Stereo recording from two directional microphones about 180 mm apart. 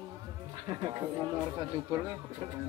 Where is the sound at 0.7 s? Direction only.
25° right (ahead or behind).